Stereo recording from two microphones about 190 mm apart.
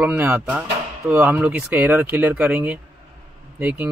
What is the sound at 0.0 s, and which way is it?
Speech, 10° right (ahead or behind).